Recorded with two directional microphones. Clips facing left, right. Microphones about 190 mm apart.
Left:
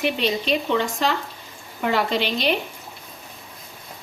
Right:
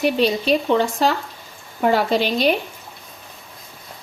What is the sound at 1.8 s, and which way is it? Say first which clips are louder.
Speech: right 4 dB; 40° right (ahead or behind).